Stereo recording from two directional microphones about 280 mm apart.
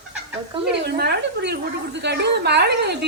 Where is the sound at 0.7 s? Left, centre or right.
Right.